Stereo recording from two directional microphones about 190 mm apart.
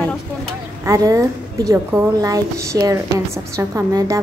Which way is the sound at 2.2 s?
20° right (ahead or behind).